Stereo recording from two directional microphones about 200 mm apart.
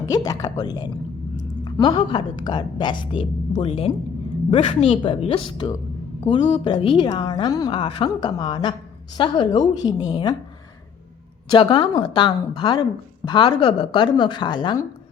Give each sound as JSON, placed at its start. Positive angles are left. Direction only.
{"t": 0.0, "sound": "a woman's voice", "side_deg": 20}
{"t": 11.5, "sound": "a woman's voice", "side_deg": 25}